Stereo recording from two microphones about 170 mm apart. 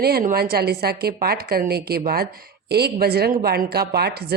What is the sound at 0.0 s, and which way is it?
A woman's voice, 60° right (ahead or behind).